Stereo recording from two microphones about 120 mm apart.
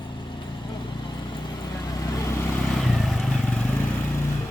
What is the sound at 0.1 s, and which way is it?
Vehicle, 40° left (ahead or behind).